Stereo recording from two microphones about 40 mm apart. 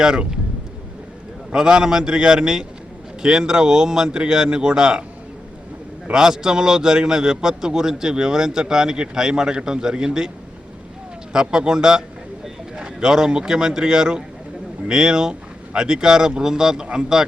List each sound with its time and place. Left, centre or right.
0.0 s a man's voice: centre
1.5 s a man's voice: centre
6.1 s a man's voice: centre